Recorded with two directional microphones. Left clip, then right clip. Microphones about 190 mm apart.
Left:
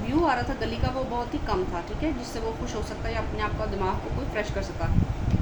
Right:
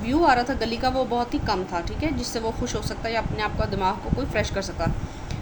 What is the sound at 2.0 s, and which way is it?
A woman's voice, 50° right (ahead or behind).